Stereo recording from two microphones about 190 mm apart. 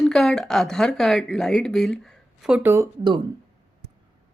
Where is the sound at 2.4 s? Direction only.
10° right (ahead or behind).